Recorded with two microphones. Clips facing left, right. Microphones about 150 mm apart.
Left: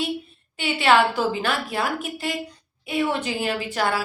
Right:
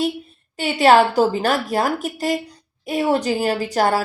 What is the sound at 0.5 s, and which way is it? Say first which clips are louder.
Speech: right 5 dB; 40° right (ahead or behind).